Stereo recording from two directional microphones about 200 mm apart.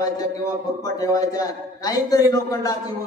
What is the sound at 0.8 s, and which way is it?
A man's voice, 15° left (ahead or behind).